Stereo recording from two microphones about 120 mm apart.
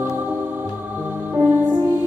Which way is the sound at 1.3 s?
15° right (ahead or behind).